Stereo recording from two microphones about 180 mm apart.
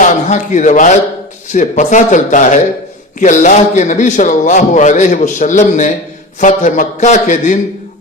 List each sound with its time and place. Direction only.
0.0 s a man's voice: 45° left (ahead or behind)